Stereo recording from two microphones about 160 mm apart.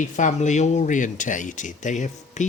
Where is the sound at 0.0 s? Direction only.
50° left (ahead or behind).